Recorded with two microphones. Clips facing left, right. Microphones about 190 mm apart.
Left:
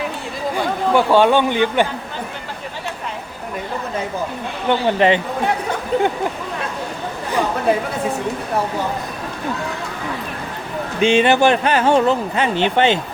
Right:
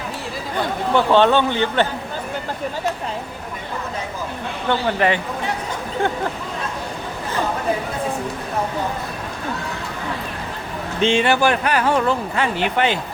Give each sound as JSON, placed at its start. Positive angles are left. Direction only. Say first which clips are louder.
{"t": 0.5, "sound": "speech", "louder": "left 2 dB", "side_deg": 10}
{"t": 4.7, "sound": "speech", "louder": "left 4 dB", "side_deg": 20}
{"t": 11.0, "sound": "speech", "louder": "left 3 dB", "side_deg": 20}